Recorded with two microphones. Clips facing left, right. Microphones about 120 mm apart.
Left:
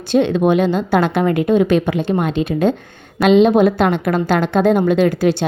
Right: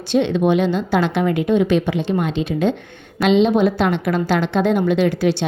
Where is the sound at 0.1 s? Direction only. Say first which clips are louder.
Left 2 dB; 45° left (ahead or behind).